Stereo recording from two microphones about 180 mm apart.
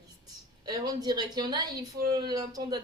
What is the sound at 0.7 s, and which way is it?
Speech, 20° right (ahead or behind).